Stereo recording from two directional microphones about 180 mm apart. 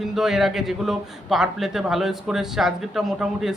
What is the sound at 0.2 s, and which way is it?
A man's voice, centre (ahead or behind).